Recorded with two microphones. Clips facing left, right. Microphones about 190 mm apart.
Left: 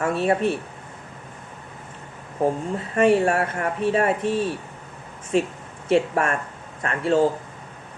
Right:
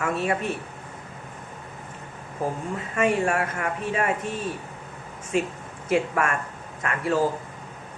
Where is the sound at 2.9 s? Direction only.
35° left (ahead or behind).